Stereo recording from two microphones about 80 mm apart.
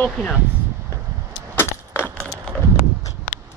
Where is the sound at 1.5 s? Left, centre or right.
Left.